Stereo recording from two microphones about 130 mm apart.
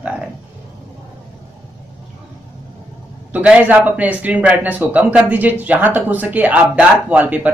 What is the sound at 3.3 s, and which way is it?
Speech, 10° right (ahead or behind).